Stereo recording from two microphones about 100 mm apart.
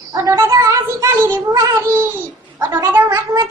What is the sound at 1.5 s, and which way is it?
Child singing, 30° right (ahead or behind).